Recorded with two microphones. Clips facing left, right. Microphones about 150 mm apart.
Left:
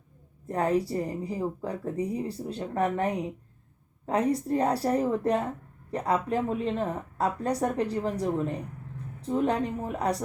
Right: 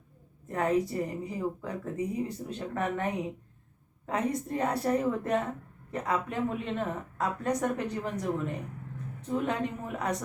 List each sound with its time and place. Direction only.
0.4 s speech: 35° left (ahead or behind)